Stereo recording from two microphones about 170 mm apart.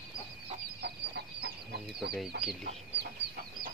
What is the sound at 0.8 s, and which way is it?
Chicken, 80° right.